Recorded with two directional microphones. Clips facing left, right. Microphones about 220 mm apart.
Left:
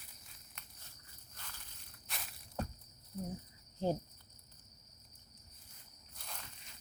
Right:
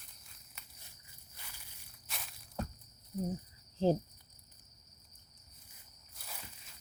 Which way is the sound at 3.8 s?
30° right (ahead or behind).